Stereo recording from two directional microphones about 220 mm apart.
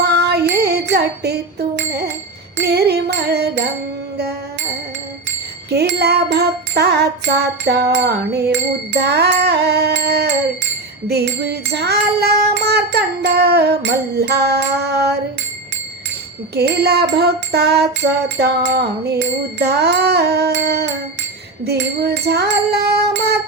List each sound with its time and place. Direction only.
0.0 s music: 50° right (ahead or behind)
5.7 s music: 45° right (ahead or behind)
16.6 s music: 50° right (ahead or behind)